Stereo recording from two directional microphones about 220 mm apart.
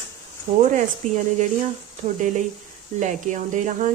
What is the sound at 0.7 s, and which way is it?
Speech, 35° right (ahead or behind).